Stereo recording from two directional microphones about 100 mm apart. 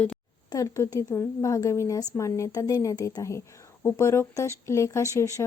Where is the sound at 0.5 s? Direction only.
35° left (ahead or behind).